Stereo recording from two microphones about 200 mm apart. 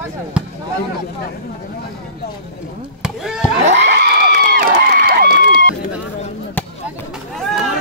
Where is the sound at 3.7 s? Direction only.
60° right (ahead or behind).